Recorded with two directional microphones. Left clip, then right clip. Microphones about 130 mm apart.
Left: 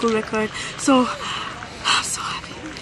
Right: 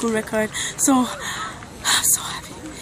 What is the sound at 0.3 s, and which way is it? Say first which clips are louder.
Speech: right 1 dB; 30° right (ahead or behind).